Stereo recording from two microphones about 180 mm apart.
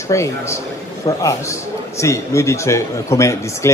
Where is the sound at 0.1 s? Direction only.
15° left (ahead or behind).